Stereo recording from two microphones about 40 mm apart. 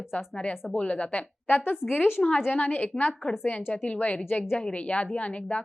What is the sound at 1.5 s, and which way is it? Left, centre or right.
Speech, left.